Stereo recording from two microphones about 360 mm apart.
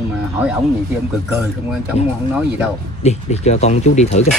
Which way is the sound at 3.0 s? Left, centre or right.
Centre.